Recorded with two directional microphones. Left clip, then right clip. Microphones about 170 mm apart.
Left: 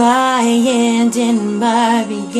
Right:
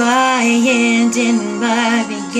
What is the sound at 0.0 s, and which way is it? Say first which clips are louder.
Music: left 1 dB; 20° left (ahead or behind).